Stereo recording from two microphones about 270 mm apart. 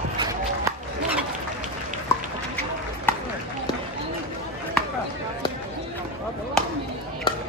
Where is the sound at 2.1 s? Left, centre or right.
Centre.